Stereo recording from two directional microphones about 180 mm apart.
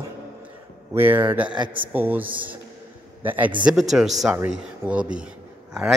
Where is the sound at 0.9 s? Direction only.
10° right (ahead or behind).